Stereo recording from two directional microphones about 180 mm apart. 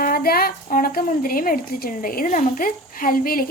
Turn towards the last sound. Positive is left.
turn(degrees=50)  # may be behind; listen again after turning